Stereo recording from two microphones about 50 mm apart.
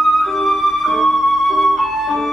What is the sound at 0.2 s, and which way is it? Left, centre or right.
Flute, centre.